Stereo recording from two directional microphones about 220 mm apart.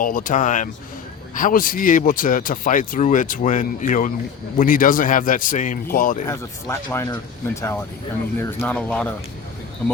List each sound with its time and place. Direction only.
0.0 s speech: 40° left (ahead or behind)
6.2 s speech: 10° left (ahead or behind)